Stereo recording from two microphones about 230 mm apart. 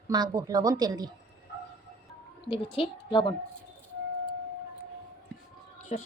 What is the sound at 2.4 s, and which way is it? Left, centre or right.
Speech, left.